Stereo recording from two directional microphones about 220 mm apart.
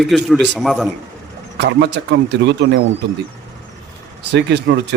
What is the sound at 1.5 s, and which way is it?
Speech, 50° right (ahead or behind).